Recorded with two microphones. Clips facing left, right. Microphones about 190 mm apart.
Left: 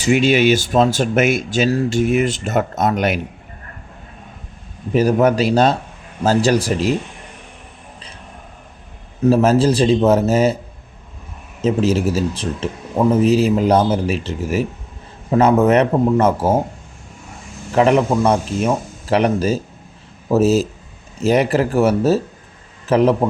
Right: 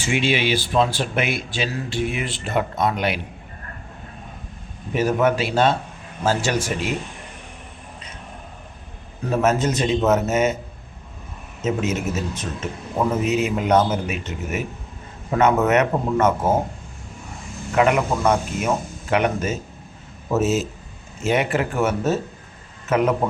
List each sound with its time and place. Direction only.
0.0 s speech: 40° left (ahead or behind)
4.9 s a man's voice: 35° left (ahead or behind)
9.3 s a man's voice: 35° left (ahead or behind)
11.6 s a man's voice: 30° left (ahead or behind)
17.7 s a man's voice: 30° left (ahead or behind)